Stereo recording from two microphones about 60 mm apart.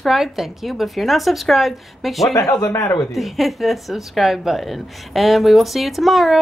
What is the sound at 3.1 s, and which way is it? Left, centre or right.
Speech, centre.